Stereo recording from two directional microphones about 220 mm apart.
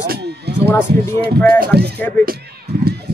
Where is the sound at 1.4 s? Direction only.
45° right (ahead or behind).